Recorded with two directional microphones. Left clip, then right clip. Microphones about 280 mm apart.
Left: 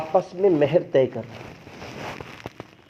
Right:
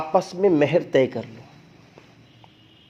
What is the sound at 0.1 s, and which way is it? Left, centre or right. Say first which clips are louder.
Speech: even; right.